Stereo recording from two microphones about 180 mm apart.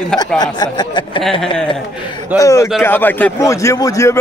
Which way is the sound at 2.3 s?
15° left (ahead or behind).